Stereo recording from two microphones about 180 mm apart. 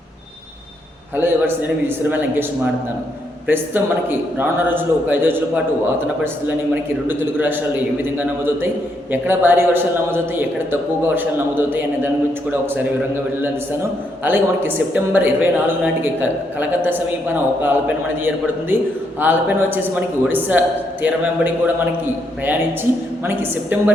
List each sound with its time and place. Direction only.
1.1 s a woman's voice: 10° right (ahead or behind)
3.5 s a woman's voice: 10° right (ahead or behind)
7.1 s a woman's voice: 10° right (ahead or behind)
9.1 s a woman's voice: 10° right (ahead or behind)
14.3 s a woman's voice: 10° right (ahead or behind)